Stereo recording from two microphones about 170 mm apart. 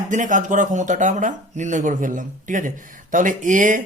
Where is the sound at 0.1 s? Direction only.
50° right (ahead or behind).